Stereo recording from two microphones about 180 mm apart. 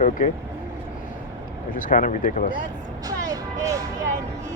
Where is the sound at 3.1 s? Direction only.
20° right (ahead or behind).